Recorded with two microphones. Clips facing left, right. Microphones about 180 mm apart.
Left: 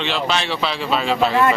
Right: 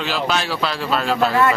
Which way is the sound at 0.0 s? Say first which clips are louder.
Even; 5° right (ahead or behind).